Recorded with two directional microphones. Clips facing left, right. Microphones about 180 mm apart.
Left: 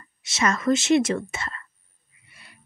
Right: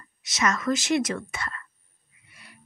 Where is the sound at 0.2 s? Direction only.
30° left (ahead or behind).